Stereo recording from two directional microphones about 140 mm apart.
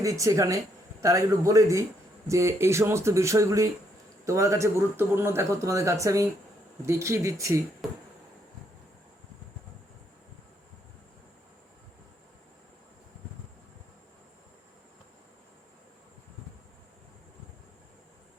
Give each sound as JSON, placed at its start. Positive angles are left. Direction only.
{"t": 0.0, "sound": "speech", "side_deg": -25}
{"t": 7.8, "sound": "speech", "side_deg": 0}